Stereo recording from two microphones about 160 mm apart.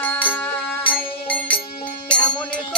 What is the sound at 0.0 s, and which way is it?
Music, 10° left (ahead or behind).